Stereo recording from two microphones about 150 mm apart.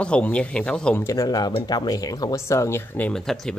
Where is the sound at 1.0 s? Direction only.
20° left (ahead or behind).